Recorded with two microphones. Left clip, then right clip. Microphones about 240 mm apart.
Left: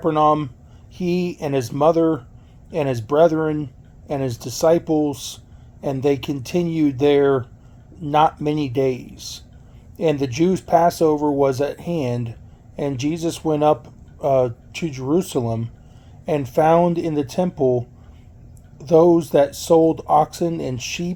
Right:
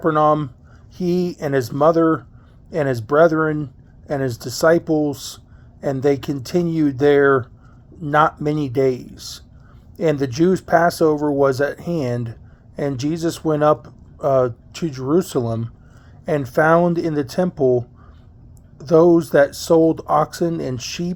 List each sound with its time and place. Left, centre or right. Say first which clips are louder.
0.2 s speech: even; right
0.9 s speech: right 2 dB; right
8.4 s speech: right 2 dB; right